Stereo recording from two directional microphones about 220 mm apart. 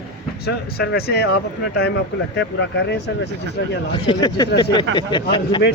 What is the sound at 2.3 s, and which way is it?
Speech, 50° left (ahead or behind).